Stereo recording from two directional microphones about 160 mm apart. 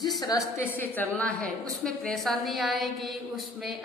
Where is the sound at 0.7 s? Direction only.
10° left (ahead or behind).